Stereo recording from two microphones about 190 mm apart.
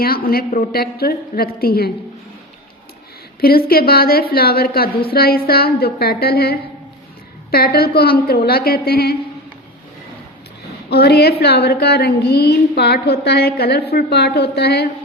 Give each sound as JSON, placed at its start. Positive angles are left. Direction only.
{"t": 0.0, "sound": "a woman's voice", "side_deg": 50}
{"t": 3.7, "sound": "a woman's voice", "side_deg": 50}
{"t": 10.8, "sound": "a woman's voice", "side_deg": 60}